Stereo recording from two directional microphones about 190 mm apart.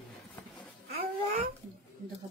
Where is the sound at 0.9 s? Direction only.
40° right (ahead or behind).